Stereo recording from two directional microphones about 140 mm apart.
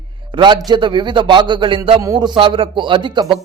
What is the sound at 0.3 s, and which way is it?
Speech, 35° right (ahead or behind).